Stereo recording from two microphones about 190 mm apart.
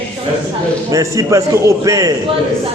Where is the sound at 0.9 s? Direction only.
15° right (ahead or behind).